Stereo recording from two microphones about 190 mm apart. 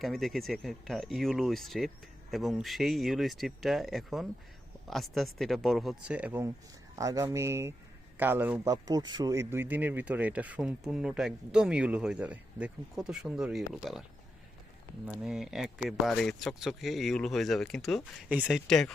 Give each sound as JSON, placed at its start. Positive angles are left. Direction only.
{"t": 0.0, "sound": "speech", "side_deg": 0}
{"t": 15.0, "sound": "speech", "side_deg": -5}